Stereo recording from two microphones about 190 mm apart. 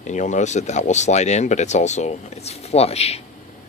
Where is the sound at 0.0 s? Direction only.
40° left (ahead or behind).